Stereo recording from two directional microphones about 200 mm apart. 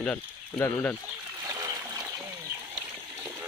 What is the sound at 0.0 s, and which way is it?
Speech, 5° left (ahead or behind).